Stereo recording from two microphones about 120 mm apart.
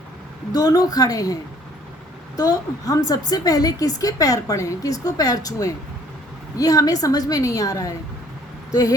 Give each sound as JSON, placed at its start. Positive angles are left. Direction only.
{"t": 0.5, "sound": "a woman's voice", "side_deg": 30}